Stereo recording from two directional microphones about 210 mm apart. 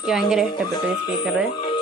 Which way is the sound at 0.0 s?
5° right (ahead or behind).